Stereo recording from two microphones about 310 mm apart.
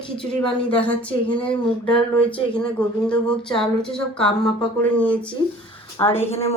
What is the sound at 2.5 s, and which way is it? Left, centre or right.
A woman's voice, centre.